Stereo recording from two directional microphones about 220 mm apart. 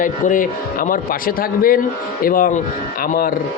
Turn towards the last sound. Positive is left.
turn(degrees=40)  # may be behind; listen again after turning